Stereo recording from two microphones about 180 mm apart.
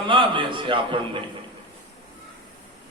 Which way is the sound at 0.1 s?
25° right (ahead or behind).